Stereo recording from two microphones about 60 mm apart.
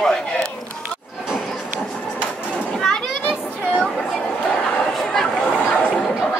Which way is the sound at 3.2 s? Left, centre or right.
Centre.